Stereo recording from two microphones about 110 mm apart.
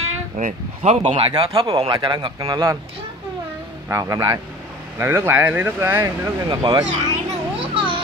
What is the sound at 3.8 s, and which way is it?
Speech, 30° right (ahead or behind).